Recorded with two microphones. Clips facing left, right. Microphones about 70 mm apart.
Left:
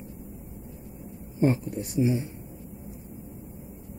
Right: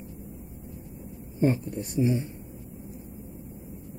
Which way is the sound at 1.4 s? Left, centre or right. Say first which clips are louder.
Left 1 dB; centre.